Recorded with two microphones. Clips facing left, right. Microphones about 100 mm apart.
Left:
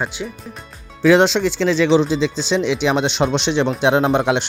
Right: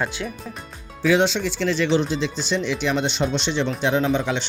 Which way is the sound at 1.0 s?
85° left.